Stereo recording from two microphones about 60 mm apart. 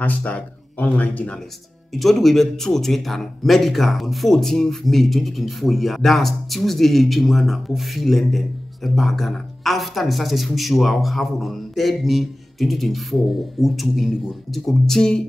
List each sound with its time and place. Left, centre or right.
0.0 s speech: left
2.0 s speech: centre